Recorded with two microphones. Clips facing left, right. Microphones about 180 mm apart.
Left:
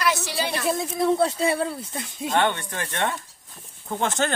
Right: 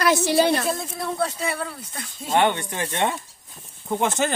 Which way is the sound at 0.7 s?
15° left (ahead or behind).